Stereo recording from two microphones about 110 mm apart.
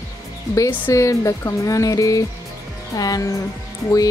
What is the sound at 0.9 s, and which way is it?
Speech, 30° left (ahead or behind).